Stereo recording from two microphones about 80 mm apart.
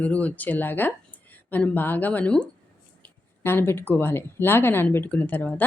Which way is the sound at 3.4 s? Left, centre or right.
Left.